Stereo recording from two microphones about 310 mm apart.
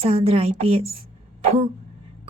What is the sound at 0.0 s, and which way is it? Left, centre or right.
A woman's voice, centre.